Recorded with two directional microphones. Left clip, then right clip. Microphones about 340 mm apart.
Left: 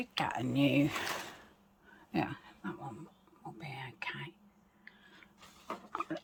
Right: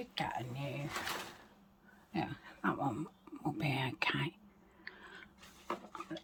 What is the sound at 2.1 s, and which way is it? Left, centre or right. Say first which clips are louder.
Speech: left 4 dB; centre.